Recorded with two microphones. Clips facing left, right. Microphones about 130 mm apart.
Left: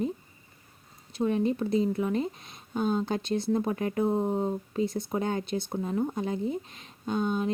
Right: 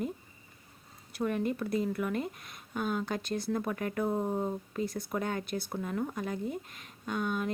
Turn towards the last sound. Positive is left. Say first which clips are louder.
# left 5 dB
turn(degrees=25)  # may be behind; listen again after turning